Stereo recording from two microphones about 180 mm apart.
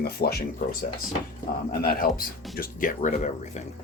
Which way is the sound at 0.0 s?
60° left (ahead or behind).